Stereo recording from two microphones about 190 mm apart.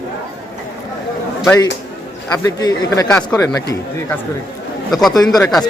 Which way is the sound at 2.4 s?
20° left (ahead or behind).